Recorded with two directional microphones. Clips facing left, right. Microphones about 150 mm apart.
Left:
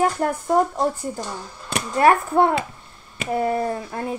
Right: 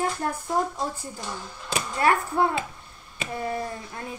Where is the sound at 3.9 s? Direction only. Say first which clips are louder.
Left 9 dB; 50° left (ahead or behind).